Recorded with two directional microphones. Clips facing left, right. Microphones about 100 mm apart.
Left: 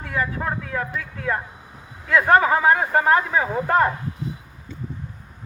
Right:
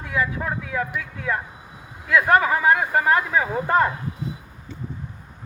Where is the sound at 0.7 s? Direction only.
10° right (ahead or behind).